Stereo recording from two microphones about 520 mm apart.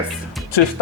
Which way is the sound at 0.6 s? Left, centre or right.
Left.